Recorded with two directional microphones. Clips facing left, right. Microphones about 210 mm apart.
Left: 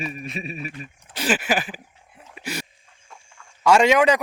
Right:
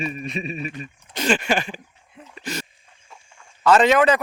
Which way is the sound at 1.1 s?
5° left (ahead or behind).